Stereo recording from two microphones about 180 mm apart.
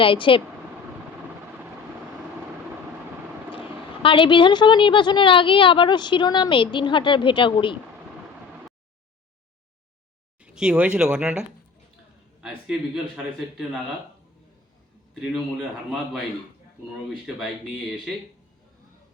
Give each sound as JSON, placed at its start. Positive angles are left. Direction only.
{"t": 0.0, "sound": "a woman's voice", "side_deg": 30}
{"t": 4.0, "sound": "a woman's voice", "side_deg": 30}
{"t": 10.4, "sound": "a man's voice", "side_deg": -5}
{"t": 17.2, "sound": "a man's voice", "side_deg": 0}